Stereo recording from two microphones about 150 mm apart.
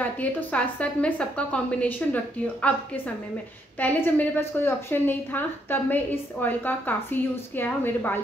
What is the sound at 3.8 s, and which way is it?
A woman's voice, 15° left (ahead or behind).